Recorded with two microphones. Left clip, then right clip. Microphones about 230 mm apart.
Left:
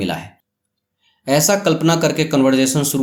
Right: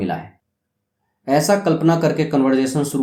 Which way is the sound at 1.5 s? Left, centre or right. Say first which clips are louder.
Left 1 dB; left.